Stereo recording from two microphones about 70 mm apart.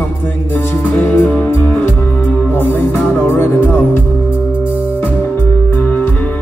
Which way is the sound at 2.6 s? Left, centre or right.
Left.